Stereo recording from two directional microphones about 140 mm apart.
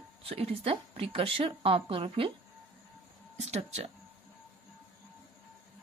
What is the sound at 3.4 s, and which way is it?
Speech, 50° right (ahead or behind).